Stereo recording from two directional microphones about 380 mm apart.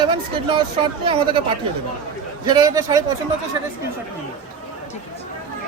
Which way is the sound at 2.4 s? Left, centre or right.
Centre.